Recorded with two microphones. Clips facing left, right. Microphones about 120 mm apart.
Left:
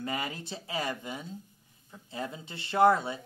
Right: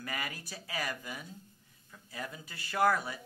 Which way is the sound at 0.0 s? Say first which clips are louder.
Left 5 dB; 25° left (ahead or behind).